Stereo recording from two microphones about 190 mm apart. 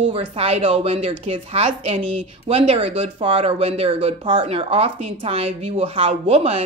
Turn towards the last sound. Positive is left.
turn(degrees=-30)  # may be behind; listen again after turning